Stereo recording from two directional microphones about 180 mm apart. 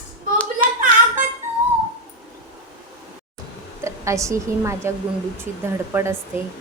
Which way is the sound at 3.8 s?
15° right (ahead or behind).